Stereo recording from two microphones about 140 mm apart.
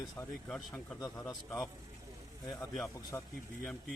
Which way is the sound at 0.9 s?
25° left (ahead or behind).